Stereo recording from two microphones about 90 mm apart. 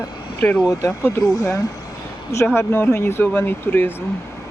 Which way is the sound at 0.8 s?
35° left (ahead or behind).